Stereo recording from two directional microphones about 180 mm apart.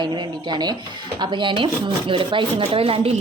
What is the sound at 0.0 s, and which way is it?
Speech, 25° right (ahead or behind).